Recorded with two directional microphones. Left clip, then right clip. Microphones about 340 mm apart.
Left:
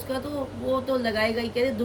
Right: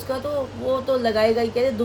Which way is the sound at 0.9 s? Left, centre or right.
Centre.